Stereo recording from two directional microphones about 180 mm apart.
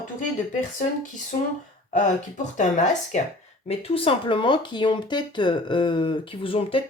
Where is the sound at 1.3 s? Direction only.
55° left (ahead or behind).